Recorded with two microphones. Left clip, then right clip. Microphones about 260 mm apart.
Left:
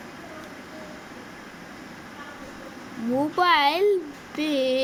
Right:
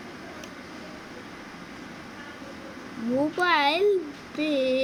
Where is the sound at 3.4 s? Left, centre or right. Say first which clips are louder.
Left 3 dB; centre.